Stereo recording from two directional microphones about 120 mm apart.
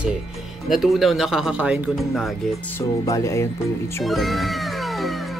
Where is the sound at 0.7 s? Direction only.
Centre (ahead or behind).